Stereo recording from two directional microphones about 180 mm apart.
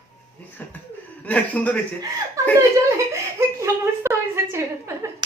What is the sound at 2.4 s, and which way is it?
Chuckle, 15° right (ahead or behind).